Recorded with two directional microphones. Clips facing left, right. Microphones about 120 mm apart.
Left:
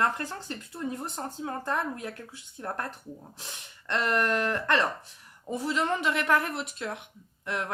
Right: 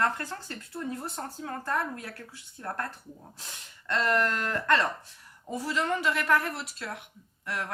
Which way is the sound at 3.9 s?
15° left (ahead or behind).